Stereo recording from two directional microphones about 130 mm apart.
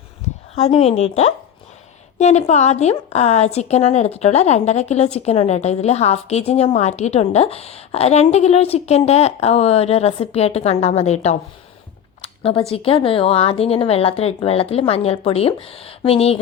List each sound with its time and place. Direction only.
0.5 s a woman's voice: 55° left (ahead or behind)
12.2 s a sound: 45° left (ahead or behind)
12.7 s a woman's voice: 45° left (ahead or behind)